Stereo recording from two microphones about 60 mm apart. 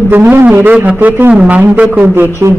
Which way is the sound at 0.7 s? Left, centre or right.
Right.